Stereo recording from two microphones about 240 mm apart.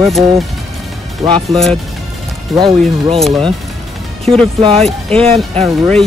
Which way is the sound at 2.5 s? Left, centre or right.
Centre.